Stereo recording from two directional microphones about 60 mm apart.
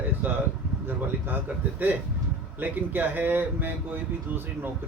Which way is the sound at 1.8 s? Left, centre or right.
Right.